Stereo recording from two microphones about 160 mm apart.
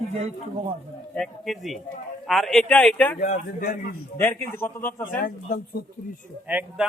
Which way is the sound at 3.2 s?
70° left (ahead or behind).